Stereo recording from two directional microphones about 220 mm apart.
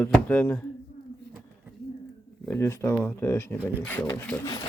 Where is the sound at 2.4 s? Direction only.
10° left (ahead or behind).